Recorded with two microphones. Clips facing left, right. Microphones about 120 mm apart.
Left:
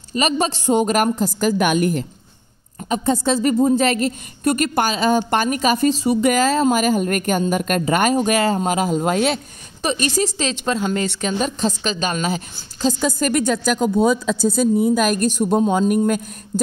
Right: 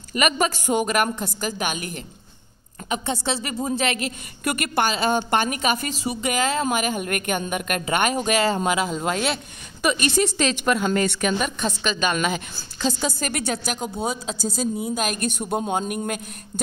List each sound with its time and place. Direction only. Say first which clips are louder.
0.1 s a woman's voice: left 2 dB; 30° left (ahead or behind); by 14.9 s 55° left (ahead or behind)
15.0 s speech: left 8 dB; 40° left (ahead or behind)